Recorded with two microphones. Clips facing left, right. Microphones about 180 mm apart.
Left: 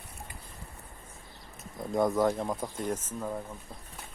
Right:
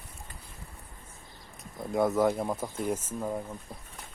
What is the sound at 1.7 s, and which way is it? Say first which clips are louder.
Speech: right 1 dB; 5° right (ahead or behind).